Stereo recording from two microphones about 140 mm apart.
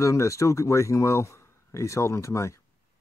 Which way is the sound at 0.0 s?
20° left (ahead or behind).